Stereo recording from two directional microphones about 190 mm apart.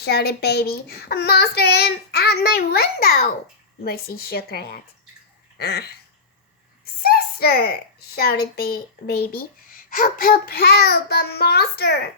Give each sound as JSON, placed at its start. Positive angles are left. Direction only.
{"t": 0.0, "sound": "a child's voice", "side_deg": 60}